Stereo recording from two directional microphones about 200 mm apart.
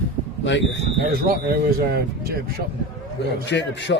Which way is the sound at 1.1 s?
50° right (ahead or behind).